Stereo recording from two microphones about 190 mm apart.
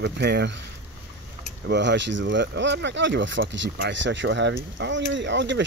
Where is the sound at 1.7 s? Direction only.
65° right (ahead or behind).